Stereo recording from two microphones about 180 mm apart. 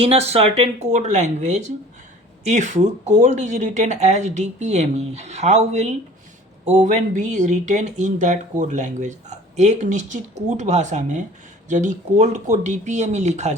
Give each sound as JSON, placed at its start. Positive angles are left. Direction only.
{"t": 0.0, "sound": "speech", "side_deg": -35}